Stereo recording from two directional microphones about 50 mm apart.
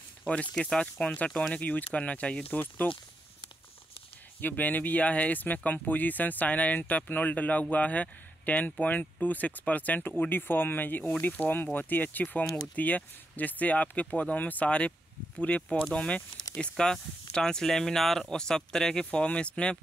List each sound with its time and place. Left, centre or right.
0.6 s speech: centre
2.5 s speech: left
4.4 s speech: left